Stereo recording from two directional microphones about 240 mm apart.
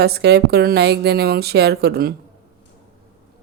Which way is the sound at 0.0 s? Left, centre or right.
Right.